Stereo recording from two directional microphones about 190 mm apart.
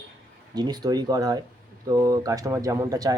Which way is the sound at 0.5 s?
20° right (ahead or behind).